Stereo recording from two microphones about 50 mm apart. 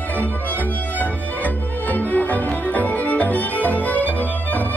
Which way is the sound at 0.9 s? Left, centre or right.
Left.